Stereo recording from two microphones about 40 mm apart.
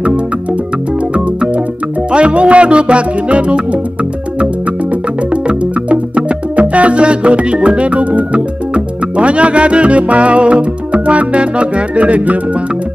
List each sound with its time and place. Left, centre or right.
0.0 s music: right
5.3 s music: right